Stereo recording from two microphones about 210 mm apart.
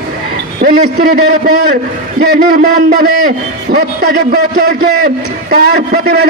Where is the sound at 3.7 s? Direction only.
50° right (ahead or behind).